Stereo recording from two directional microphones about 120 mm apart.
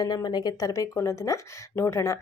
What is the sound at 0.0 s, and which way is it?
Speech, 35° left (ahead or behind).